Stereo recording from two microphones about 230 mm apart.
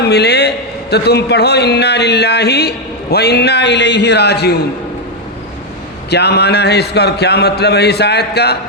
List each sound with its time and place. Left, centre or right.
0.0 s a man's voice: left
6.1 s a man's voice: left